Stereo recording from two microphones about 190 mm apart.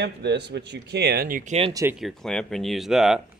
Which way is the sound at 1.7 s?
15° right (ahead or behind).